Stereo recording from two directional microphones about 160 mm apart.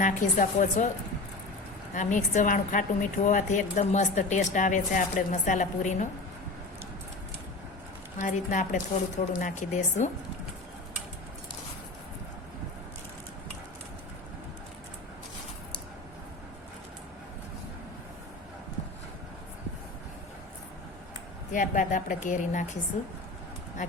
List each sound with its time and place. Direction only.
0.0 s a woman's voice: 50° left (ahead or behind)
1.9 s a woman's voice: 50° left (ahead or behind)
8.2 s a woman's voice: 50° left (ahead or behind)
21.5 s a woman's voice: 55° left (ahead or behind)